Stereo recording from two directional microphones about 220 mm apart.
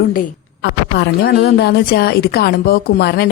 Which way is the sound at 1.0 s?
50° left (ahead or behind).